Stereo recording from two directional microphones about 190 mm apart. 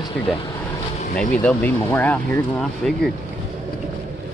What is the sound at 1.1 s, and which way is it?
Speech, 10° left (ahead or behind).